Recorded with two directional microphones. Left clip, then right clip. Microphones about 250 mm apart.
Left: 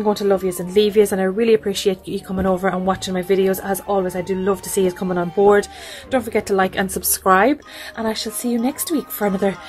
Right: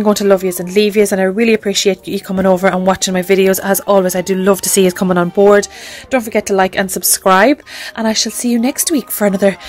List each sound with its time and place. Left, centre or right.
0.0 s speech: right